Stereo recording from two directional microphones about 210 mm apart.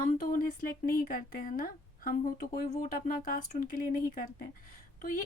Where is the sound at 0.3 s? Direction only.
40° left (ahead or behind).